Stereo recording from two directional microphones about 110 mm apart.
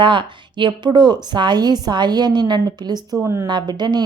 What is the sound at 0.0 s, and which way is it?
A woman's voice, 45° right (ahead or behind).